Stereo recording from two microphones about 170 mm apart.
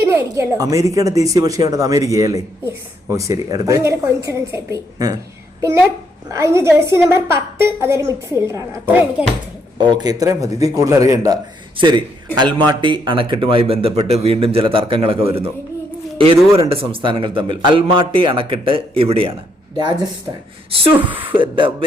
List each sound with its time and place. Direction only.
0.0 s a woman's voice: 15° right (ahead or behind)
6.3 s a woman's voice: 15° right (ahead or behind)
9.7 s a woman's voice: 25° right (ahead or behind)
20.7 s a sound: 35° right (ahead or behind)
21.2 s a woman's voice: 30° right (ahead or behind)